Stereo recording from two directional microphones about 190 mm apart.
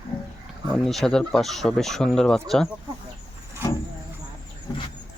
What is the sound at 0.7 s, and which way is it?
Speech, centre (ahead or behind).